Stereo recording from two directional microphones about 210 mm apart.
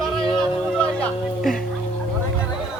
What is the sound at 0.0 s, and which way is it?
Music, 5° left (ahead or behind).